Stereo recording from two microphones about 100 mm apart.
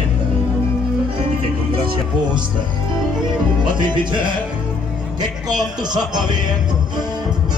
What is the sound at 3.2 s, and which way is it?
Music, 50° right (ahead or behind).